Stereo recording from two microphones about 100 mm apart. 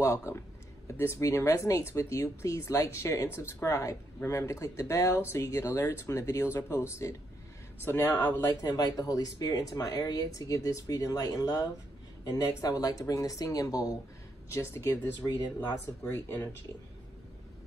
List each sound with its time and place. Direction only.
0.0 s speech: 30° left (ahead or behind)
8.5 s speech: 35° left (ahead or behind)
14.5 s speech: 25° left (ahead or behind)
16.0 s speech: 20° left (ahead or behind)